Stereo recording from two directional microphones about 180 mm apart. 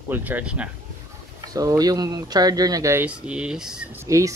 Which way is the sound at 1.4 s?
20° right (ahead or behind).